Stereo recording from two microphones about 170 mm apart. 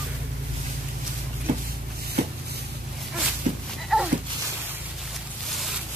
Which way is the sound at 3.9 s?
Centre (ahead or behind).